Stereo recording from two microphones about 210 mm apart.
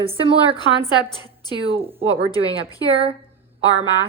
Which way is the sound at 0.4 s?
20° left (ahead or behind).